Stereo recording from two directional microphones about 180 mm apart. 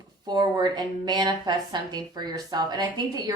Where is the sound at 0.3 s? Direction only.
25° right (ahead or behind).